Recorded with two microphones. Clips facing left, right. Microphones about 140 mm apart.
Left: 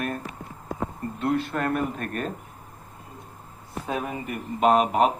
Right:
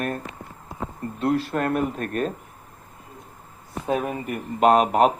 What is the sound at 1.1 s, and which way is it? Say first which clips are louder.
Speech: right 3 dB; 35° right (ahead or behind).